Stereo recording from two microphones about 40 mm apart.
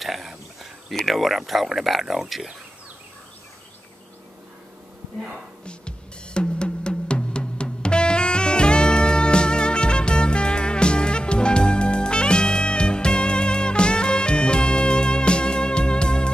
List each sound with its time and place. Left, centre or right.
0.0 s a sound: centre
0.9 s speech: centre
5.7 s drum: left